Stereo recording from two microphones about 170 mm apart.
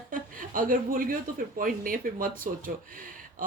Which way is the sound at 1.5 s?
55° right (ahead or behind).